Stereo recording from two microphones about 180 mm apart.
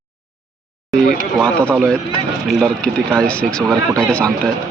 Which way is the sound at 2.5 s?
Centre (ahead or behind).